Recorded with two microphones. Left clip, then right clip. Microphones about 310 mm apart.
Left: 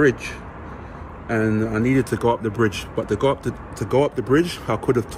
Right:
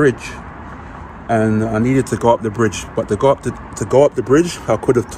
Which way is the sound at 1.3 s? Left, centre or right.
Centre.